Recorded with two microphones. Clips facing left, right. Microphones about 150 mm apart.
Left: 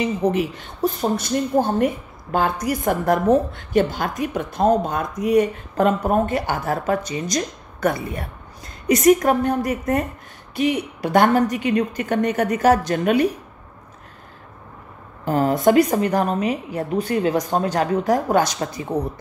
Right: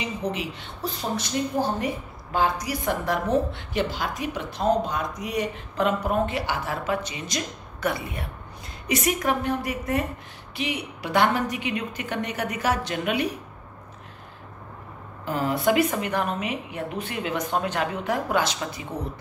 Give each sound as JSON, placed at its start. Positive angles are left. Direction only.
{"t": 0.0, "sound": "speech", "side_deg": 45}
{"t": 15.2, "sound": "speech", "side_deg": 45}